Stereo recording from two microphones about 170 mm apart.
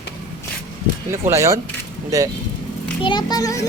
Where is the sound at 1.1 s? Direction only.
15° right (ahead or behind).